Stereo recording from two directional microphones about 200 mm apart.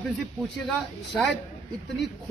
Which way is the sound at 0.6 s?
5° left (ahead or behind).